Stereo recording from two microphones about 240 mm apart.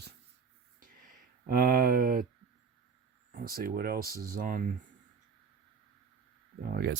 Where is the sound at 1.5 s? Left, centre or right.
Right.